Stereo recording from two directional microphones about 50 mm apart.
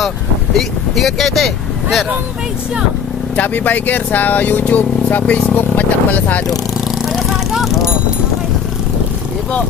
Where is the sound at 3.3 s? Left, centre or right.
Left.